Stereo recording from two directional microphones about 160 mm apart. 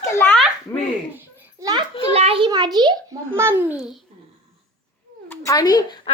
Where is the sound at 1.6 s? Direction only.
25° right (ahead or behind).